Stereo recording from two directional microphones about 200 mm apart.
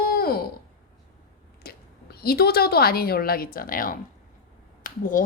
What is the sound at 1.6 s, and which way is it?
A woman's voice, 50° left (ahead or behind).